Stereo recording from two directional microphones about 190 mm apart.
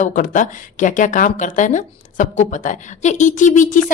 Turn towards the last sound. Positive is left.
turn(degrees=40)  # may be behind; listen again after turning